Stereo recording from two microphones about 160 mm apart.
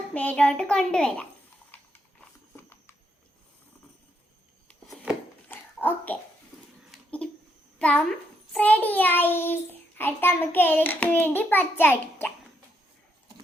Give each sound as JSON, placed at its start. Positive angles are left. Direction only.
{"t": 0.1, "sound": "a child's voice", "side_deg": 10}
{"t": 1.7, "sound": "a sound", "side_deg": 10}
{"t": 5.5, "sound": "dog", "side_deg": 10}
{"t": 7.2, "sound": "a sound", "side_deg": 5}
{"t": 7.8, "sound": "a woman's voice", "side_deg": 5}
{"t": 8.5, "sound": "child singing", "side_deg": 10}